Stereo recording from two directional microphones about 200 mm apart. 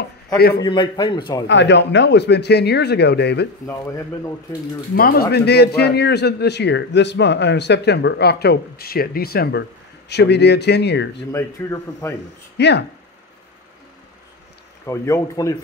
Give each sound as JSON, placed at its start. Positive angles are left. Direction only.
{"t": 0.6, "sound": "a man's voice", "side_deg": 20}
{"t": 1.5, "sound": "a man's voice", "side_deg": 65}
{"t": 3.6, "sound": "speech", "side_deg": 15}
{"t": 4.9, "sound": "a man's voice", "side_deg": 50}
{"t": 11.3, "sound": "speech", "side_deg": 15}
{"t": 12.5, "sound": "speech", "side_deg": 55}
{"t": 14.9, "sound": "speech", "side_deg": 15}